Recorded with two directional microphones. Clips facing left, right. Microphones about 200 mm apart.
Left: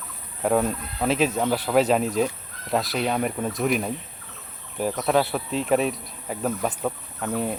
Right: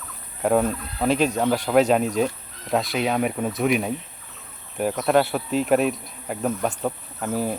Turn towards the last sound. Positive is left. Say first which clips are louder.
# right 1 dB
turn(degrees=0)  # may be behind; listen again after turning